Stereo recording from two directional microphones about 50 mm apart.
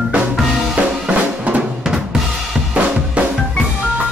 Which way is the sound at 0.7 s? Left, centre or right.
Right.